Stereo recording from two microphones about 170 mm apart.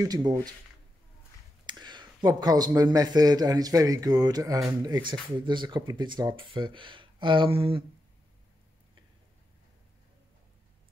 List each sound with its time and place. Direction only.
0.0 s a man's voice: 20° right (ahead or behind)
1.7 s a man's voice: 25° right (ahead or behind)